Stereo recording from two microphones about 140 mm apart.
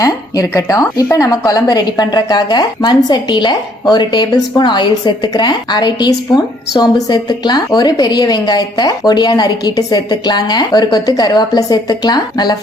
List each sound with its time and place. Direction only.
0.0 s a woman's voice: 25° left (ahead or behind)